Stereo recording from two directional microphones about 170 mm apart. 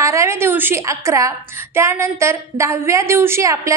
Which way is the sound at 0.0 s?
15° right (ahead or behind).